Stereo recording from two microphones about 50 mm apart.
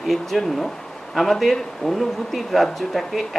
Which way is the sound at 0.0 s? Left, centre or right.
Centre.